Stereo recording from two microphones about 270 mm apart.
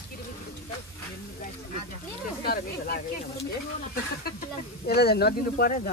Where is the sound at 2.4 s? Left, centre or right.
Left.